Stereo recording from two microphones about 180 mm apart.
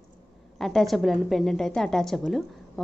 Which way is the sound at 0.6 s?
Centre (ahead or behind).